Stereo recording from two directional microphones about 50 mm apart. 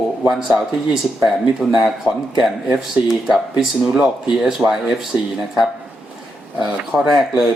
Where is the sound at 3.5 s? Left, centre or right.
Centre.